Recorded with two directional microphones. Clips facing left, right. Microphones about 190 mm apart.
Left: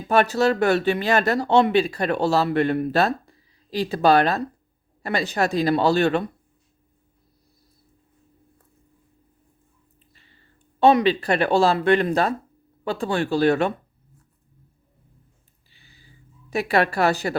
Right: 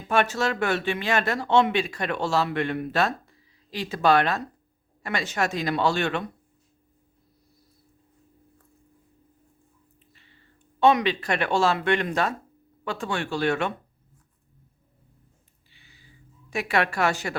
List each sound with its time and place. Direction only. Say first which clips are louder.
0.1 s speech: left 5 dB; 35° left (ahead or behind)
10.8 s speech: left 4 dB; 35° left (ahead or behind)
15.7 s a sound: left 2 dB; 35° left (ahead or behind)
16.5 s speech: left 4 dB; 35° left (ahead or behind)